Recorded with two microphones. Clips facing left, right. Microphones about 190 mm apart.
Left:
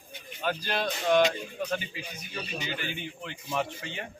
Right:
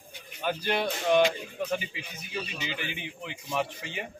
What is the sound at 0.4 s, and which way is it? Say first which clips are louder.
Speech: right 2 dB; 10° right (ahead or behind).